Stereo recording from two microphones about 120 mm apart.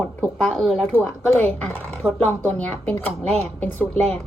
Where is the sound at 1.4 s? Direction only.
15° left (ahead or behind).